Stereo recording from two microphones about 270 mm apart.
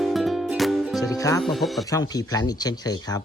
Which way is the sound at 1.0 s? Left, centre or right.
Centre.